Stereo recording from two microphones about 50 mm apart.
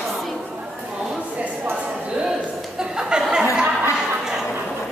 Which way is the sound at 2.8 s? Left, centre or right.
Centre.